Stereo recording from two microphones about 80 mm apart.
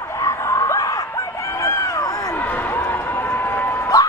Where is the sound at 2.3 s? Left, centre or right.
Left.